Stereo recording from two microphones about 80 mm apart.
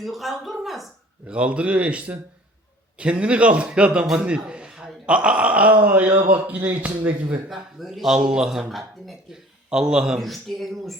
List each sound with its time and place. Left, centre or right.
0.0 s a man's voice: centre
1.3 s a man's voice: centre
7.5 s a man's voice: centre